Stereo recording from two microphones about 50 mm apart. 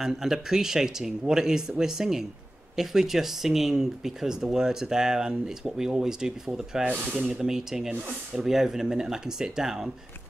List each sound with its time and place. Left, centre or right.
0.0 s speech: centre
6.8 s speech: right
7.2 s speech: right
7.4 s speech: centre